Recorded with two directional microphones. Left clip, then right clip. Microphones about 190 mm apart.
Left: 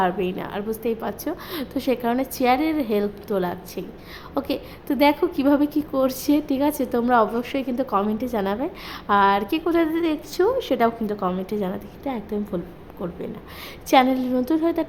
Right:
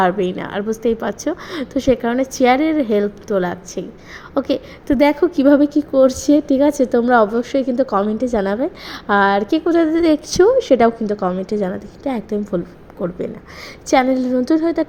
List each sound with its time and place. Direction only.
0.0 s a woman's voice: 15° right (ahead or behind)